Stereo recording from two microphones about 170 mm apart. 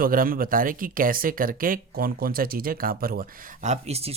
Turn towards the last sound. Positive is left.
turn(degrees=-40)  # may be behind; listen again after turning